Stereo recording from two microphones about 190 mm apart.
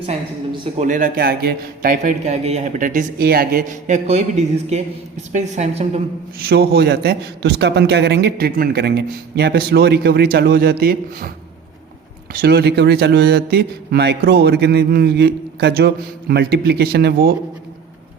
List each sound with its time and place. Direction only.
0.0 s speech: 30° right (ahead or behind)
0.9 s a man's voice: 45° right (ahead or behind)
6.4 s a man's voice: 55° right (ahead or behind)
12.3 s a man's voice: 55° right (ahead or behind)